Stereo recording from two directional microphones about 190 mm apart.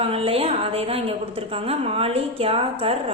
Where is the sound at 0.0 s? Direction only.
30° right (ahead or behind).